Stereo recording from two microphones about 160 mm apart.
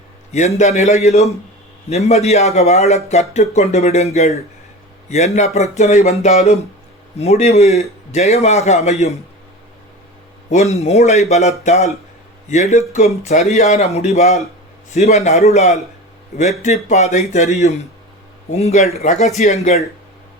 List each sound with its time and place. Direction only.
0.3 s speech: 45° left (ahead or behind)
10.5 s speech: 45° left (ahead or behind)